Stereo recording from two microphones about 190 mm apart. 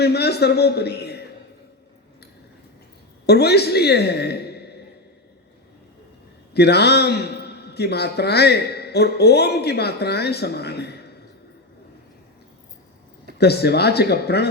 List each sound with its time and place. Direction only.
0.0 s a man's voice: 60° left (ahead or behind)
3.2 s a man's voice: 60° left (ahead or behind)
6.5 s a man's voice: 60° left (ahead or behind)
13.4 s a man's voice: 60° left (ahead or behind)